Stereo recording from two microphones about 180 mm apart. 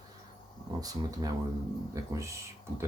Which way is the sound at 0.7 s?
20° right (ahead or behind).